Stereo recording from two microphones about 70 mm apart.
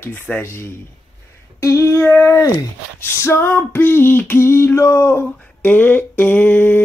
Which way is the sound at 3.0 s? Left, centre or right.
Left.